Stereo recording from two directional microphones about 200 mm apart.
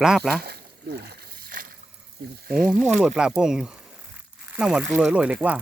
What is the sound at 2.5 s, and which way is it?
Speech, centre (ahead or behind).